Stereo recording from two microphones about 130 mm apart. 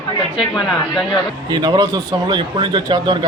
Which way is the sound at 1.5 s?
35° right (ahead or behind).